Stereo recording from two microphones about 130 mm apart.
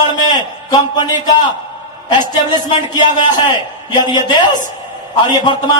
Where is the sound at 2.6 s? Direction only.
30° left (ahead or behind).